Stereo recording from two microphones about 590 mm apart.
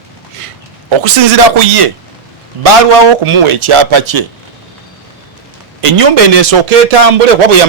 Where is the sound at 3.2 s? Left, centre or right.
Right.